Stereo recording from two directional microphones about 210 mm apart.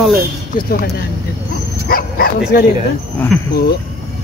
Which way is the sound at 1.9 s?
45° left (ahead or behind).